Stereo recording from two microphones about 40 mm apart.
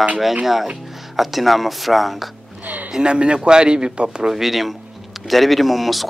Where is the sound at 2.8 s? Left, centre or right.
Right.